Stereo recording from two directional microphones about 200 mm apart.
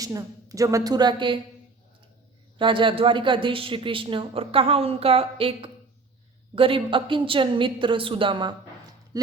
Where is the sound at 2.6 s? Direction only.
25° right (ahead or behind).